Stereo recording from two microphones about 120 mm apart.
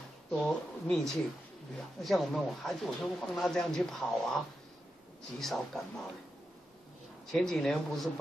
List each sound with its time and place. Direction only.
0.3 s speech: 5° left (ahead or behind)
5.4 s speech: centre (ahead or behind)
7.3 s speech: 5° left (ahead or behind)